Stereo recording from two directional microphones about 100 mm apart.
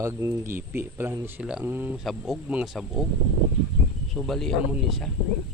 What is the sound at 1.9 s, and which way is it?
Speech, 5° right (ahead or behind).